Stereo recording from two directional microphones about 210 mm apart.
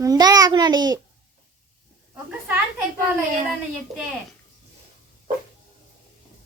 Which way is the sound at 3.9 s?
Centre (ahead or behind).